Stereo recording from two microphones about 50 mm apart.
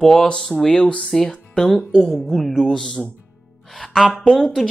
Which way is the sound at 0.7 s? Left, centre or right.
Left.